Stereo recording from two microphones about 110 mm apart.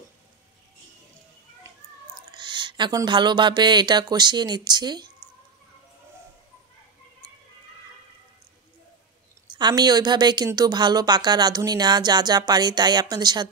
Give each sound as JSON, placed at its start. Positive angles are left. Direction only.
{"t": 2.1, "sound": "a sound", "side_deg": -45}
{"t": 3.1, "sound": "speech", "side_deg": -45}
{"t": 9.5, "sound": "speech", "side_deg": -40}